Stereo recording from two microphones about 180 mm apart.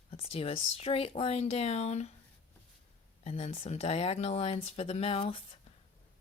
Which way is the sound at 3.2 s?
35° left (ahead or behind).